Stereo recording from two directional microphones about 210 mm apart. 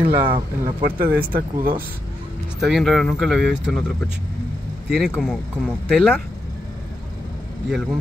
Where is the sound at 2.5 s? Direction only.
Centre (ahead or behind).